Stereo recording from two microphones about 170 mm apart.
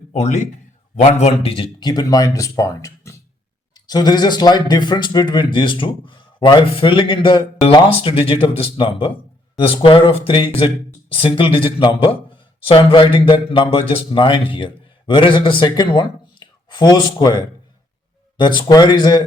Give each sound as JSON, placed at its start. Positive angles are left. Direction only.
{"t": 0.1, "sound": "speech", "side_deg": 40}